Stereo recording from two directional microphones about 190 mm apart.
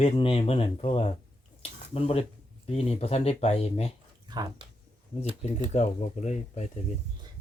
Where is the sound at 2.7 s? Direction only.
35° left (ahead or behind).